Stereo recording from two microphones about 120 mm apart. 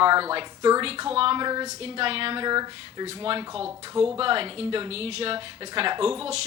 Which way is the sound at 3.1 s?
50° right (ahead or behind).